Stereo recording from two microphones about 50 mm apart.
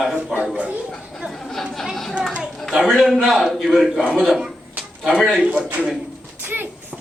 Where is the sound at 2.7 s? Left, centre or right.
Centre.